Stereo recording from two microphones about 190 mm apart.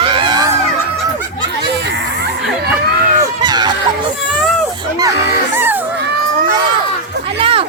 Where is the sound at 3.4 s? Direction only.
20° right (ahead or behind).